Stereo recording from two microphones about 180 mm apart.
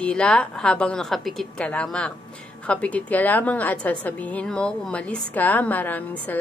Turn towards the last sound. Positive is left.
turn(degrees=10)  # may be behind; listen again after turning